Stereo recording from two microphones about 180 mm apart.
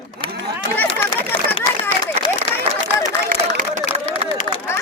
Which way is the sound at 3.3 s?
50° right (ahead or behind).